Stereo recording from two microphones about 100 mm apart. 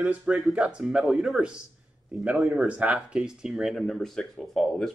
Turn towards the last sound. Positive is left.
turn(degrees=0)  # may be behind; listen again after turning